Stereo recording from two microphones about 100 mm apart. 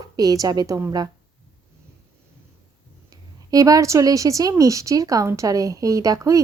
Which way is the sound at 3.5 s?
35° right (ahead or behind).